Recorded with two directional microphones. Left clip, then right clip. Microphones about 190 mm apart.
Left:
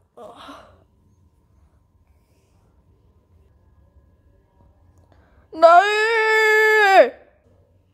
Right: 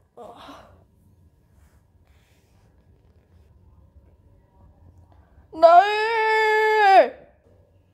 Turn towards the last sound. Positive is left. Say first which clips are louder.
# left 2 dB
turn(degrees=30)  # may be behind; listen again after turning